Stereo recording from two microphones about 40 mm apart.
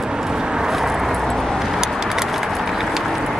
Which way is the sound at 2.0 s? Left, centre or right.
Centre.